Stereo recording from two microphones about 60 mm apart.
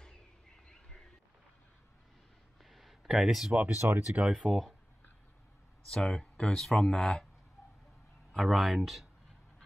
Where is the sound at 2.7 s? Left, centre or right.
Centre.